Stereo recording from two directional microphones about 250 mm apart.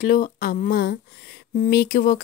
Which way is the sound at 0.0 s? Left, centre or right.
Left.